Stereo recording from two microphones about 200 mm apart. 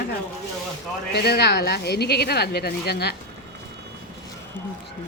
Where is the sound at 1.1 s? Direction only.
55° left (ahead or behind).